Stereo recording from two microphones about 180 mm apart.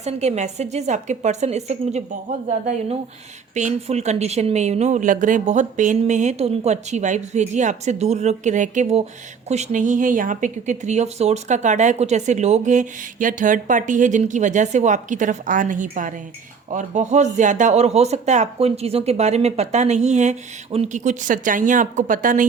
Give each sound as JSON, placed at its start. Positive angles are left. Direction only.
{"t": 0.0, "sound": "speech", "side_deg": -40}
{"t": 3.5, "sound": "speech", "side_deg": -40}